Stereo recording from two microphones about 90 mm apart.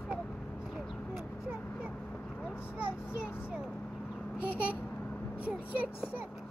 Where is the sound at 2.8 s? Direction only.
10° right (ahead or behind).